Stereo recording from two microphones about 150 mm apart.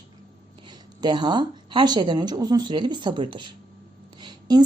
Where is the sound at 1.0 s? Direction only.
30° right (ahead or behind).